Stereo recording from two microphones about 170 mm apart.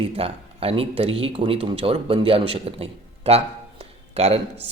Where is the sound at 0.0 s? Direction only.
35° right (ahead or behind).